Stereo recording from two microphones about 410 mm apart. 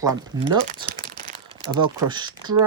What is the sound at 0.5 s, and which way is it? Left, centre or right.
Speech, centre.